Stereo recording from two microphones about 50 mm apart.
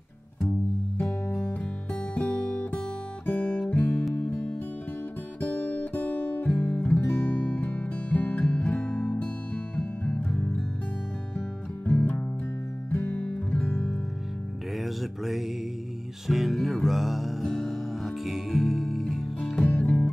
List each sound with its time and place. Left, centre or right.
1.0 s music: centre
3.3 s guitar: left
3.7 s music: left
5.4 s guitar: left
6.6 s music: left
12.9 s guitar: left
13.3 s music: left
14.8 s music: centre
19.8 s music: left